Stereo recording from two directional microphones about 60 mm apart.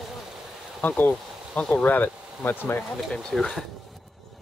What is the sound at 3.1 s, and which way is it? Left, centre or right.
Speech, centre.